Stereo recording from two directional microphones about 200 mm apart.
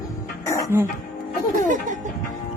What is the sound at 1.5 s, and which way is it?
Speech, 40° right (ahead or behind).